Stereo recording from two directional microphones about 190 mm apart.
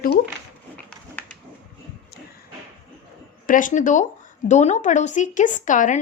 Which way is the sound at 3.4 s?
45° left (ahead or behind).